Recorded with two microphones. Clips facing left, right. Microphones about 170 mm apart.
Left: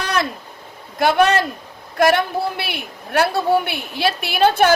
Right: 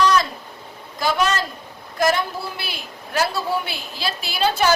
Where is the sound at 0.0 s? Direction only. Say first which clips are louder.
Right 4 dB; 60° left (ahead or behind).